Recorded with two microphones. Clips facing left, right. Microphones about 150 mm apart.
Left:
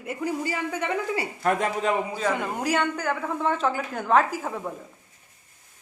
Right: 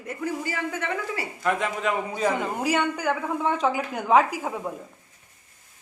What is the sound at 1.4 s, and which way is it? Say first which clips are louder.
Speech: left 1 dB; 45° left (ahead or behind).